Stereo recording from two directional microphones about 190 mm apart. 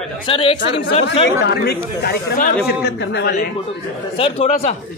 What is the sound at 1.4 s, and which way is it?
Speech, 60° left (ahead or behind).